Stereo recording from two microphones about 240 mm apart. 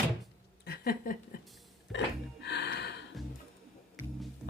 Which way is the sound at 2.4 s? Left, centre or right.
Left.